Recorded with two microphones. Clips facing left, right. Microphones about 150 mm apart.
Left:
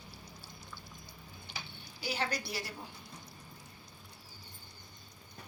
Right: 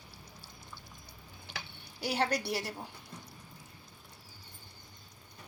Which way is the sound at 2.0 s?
70° right (ahead or behind).